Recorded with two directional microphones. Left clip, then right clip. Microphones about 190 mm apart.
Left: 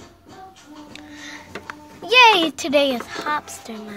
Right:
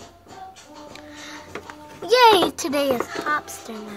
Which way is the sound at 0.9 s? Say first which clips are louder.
Left 2 dB; centre (ahead or behind).